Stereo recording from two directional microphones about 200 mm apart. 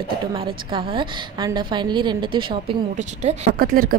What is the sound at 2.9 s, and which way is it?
Speech, 35° right (ahead or behind).